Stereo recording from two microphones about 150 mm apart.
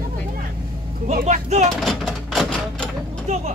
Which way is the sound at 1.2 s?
50° right (ahead or behind).